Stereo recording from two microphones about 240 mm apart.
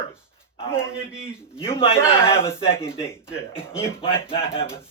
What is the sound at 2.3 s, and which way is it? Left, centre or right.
Speech, centre.